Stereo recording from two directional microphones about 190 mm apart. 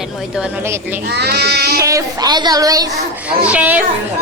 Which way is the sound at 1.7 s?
15° right (ahead or behind).